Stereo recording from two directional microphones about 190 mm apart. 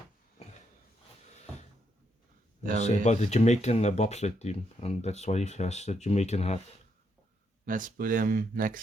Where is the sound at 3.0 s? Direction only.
35° left (ahead or behind).